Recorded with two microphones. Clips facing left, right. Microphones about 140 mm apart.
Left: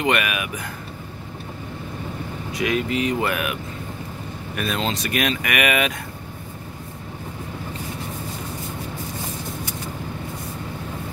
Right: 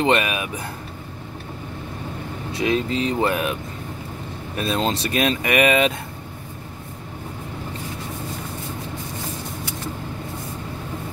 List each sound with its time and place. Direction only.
0.0 s speech: 30° right (ahead or behind)
2.5 s speech: 30° right (ahead or behind)
4.6 s speech: 30° right (ahead or behind)